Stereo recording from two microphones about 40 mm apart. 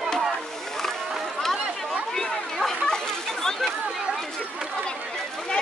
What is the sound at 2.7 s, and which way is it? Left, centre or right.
Chatter, centre.